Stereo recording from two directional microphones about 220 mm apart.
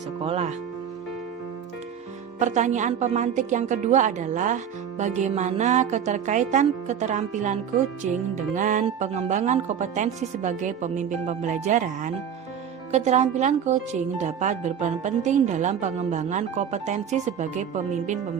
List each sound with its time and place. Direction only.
0.2 s speech: 30° right (ahead or behind)
2.4 s speech: 35° right (ahead or behind)
8.5 s speech: 35° right (ahead or behind)